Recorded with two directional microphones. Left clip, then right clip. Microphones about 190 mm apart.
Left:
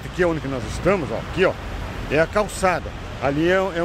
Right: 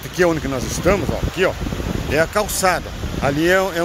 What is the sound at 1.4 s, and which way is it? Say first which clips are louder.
Speech: even; 5° left (ahead or behind).